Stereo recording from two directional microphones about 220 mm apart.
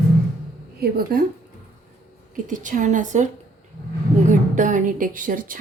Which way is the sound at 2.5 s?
35° right (ahead or behind).